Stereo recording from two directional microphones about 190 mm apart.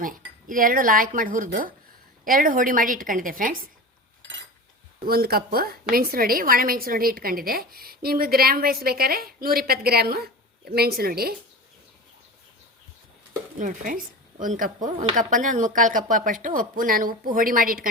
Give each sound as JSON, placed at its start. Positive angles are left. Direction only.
{"t": 0.0, "sound": "a woman's voice", "side_deg": -45}
{"t": 5.0, "sound": "a woman's voice", "side_deg": -55}
{"t": 13.6, "sound": "a woman's voice", "side_deg": -45}